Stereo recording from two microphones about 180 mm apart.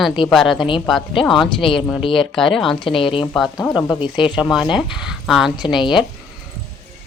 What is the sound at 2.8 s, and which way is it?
Speech, 30° left (ahead or behind).